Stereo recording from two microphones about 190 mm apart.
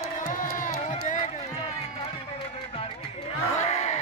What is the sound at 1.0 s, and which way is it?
Run, 40° left (ahead or behind).